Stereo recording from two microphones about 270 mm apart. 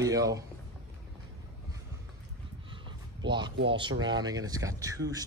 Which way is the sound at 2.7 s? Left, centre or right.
Centre.